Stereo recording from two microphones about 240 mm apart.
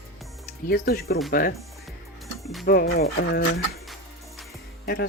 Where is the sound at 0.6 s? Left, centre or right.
Left.